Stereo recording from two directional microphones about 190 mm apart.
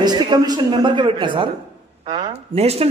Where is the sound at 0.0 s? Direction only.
20° right (ahead or behind).